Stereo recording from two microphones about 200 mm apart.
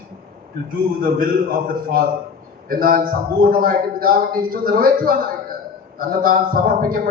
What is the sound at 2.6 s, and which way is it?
A man's voice, 45° right (ahead or behind).